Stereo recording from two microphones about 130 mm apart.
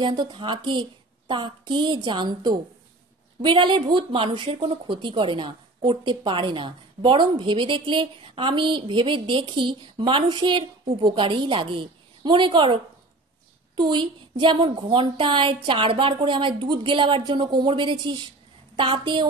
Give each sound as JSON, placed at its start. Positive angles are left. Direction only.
{"t": 0.0, "sound": "a woman's voice", "side_deg": -40}
{"t": 13.7, "sound": "a woman's voice", "side_deg": -35}